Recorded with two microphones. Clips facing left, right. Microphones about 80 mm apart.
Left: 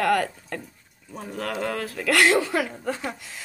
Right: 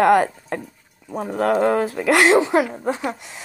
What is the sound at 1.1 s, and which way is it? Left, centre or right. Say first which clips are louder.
Speech: right 11 dB; right.